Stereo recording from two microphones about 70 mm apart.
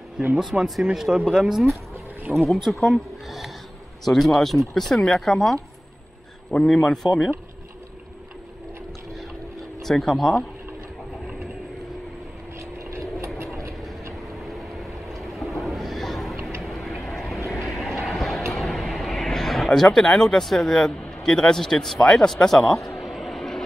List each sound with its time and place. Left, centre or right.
0.4 s speech: centre
2.3 s speech: right
2.6 s speech: centre
9.8 s speech: centre
12.5 s vehicle: right
14.4 s vehicle: centre
17.5 s a sound: centre